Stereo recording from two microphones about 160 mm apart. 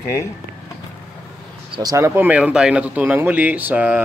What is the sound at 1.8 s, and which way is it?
Speech, 20° right (ahead or behind).